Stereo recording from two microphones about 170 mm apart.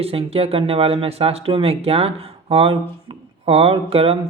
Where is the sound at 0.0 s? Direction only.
35° right (ahead or behind).